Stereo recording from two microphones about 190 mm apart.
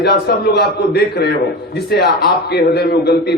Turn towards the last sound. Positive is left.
turn(degrees=60)  # may be behind; listen again after turning